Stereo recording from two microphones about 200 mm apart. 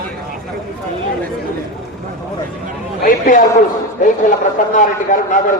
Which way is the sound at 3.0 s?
40° left (ahead or behind).